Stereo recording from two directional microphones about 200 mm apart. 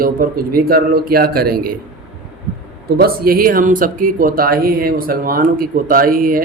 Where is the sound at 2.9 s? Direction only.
50° right (ahead or behind).